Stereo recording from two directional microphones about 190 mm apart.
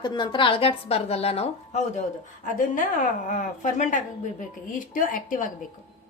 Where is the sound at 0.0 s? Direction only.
25° left (ahead or behind).